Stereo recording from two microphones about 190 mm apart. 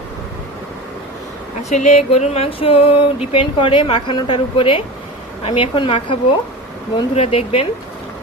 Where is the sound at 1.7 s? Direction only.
35° left (ahead or behind).